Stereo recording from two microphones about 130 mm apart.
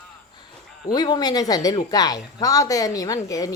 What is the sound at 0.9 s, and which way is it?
A woman's voice, 30° left (ahead or behind).